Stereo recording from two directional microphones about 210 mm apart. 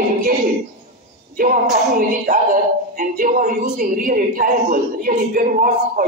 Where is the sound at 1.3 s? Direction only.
40° right (ahead or behind).